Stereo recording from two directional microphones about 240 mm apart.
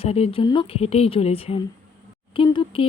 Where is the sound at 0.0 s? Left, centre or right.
Left.